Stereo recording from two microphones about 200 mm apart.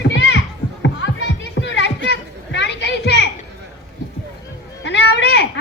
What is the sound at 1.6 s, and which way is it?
Children playing, 60° left (ahead or behind).